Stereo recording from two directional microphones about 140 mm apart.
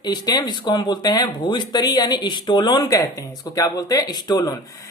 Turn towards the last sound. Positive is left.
turn(degrees=30)  # may be behind; listen again after turning